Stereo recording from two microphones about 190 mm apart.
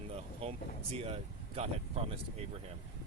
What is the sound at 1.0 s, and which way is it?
Speech, 35° right (ahead or behind).